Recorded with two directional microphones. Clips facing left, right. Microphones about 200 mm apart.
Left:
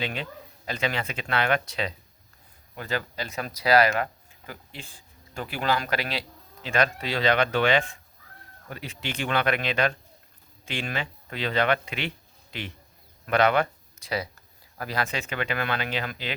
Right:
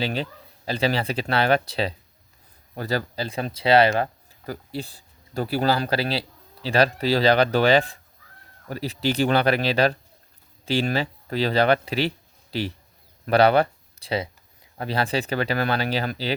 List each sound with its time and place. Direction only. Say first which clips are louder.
0.0 s speech: right 5 dB; 35° right (ahead or behind)